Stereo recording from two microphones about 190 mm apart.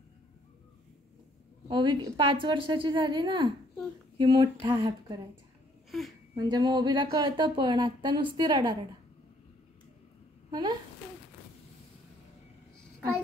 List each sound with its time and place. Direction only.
1.7 s speech: 25° right (ahead or behind)
5.9 s a sound: centre (ahead or behind)
6.3 s speech: 20° right (ahead or behind)
10.5 s a child's voice: 20° right (ahead or behind)